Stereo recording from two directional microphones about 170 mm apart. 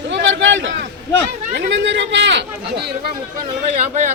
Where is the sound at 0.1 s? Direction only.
90° right.